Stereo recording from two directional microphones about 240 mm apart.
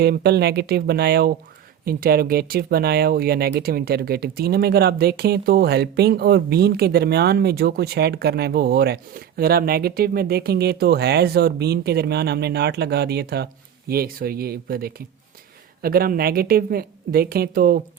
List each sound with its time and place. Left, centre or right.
0.0 s speech: right